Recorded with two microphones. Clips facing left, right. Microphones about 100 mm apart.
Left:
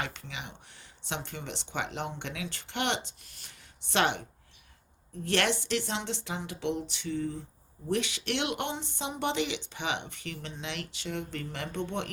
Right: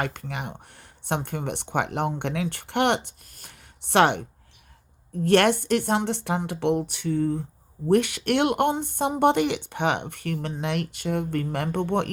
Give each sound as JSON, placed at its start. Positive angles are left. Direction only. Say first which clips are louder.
{"t": 0.0, "sound": "speech", "louder": "right 8 dB", "side_deg": -50}